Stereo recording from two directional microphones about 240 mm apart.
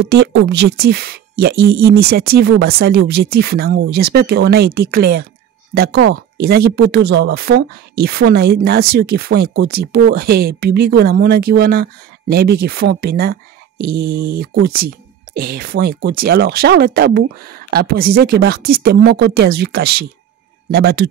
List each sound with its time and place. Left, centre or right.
0.0 s speech: right